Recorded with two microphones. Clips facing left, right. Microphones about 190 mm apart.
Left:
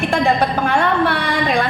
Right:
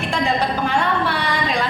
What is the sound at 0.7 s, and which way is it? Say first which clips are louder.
A man's voice: left 4 dB; 55° left (ahead or behind).